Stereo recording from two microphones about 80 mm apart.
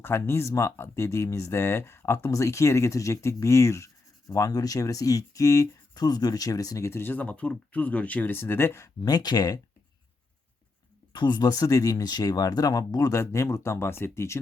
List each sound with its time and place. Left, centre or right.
0.0 s speech: left
4.4 s speech: left
9.0 s speech: left
11.1 s speech: left